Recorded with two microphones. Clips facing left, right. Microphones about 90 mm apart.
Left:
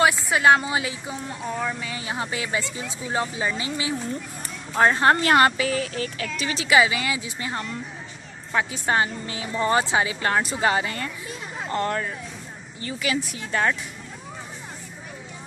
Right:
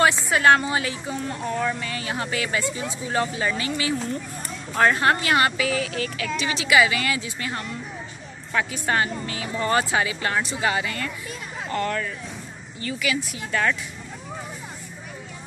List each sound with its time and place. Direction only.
0.3 s a woman's voice: 15° left (ahead or behind)
5.0 s speech: 40° left (ahead or behind)
6.9 s a woman's voice: 15° left (ahead or behind)
10.2 s a woman's voice: 40° left (ahead or behind)